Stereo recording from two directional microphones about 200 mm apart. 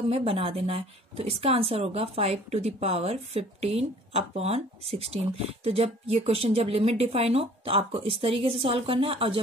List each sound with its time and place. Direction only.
0.1 s a woman's voice: 30° right (ahead or behind)